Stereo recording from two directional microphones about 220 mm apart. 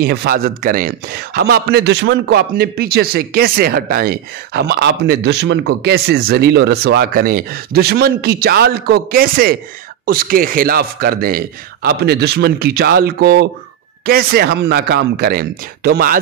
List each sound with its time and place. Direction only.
0.0 s a man's voice: 45° right (ahead or behind)